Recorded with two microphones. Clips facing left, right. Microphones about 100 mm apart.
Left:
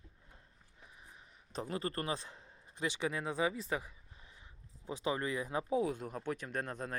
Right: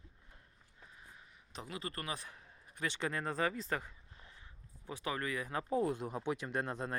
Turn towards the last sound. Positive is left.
turn(degrees=-10)  # may be behind; listen again after turning